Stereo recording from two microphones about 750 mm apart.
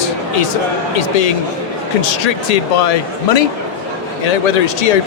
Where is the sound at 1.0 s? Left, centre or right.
Left.